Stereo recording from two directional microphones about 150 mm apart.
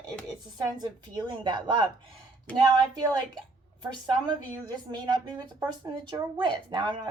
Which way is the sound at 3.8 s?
30° right (ahead or behind).